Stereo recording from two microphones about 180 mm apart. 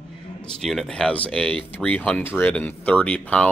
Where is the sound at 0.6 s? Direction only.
Centre (ahead or behind).